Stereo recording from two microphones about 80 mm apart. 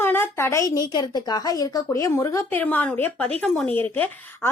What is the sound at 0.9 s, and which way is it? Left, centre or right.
Speech, left.